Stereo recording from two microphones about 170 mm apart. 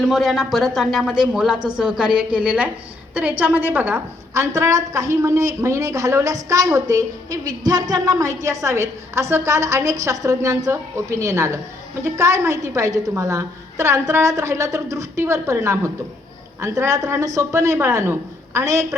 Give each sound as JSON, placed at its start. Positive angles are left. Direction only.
{"t": 0.0, "sound": "a woman's voice", "side_deg": 0}